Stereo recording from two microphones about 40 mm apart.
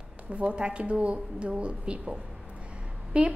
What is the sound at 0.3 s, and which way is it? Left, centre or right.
A woman's voice, right.